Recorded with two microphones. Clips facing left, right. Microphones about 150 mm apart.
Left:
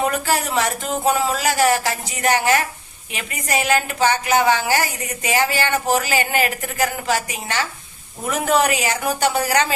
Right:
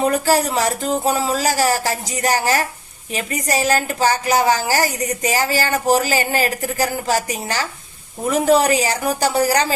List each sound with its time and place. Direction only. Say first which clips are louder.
0.0 s a woman's voice: right 4 dB; 35° right (ahead or behind)